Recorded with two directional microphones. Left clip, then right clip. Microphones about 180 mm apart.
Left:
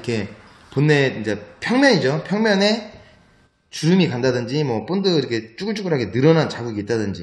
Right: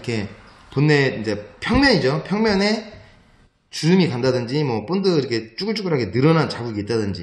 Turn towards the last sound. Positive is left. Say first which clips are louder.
# even
turn(degrees=5)  # may be behind; listen again after turning